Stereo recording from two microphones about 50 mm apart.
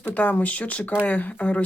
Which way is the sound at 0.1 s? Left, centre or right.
Left.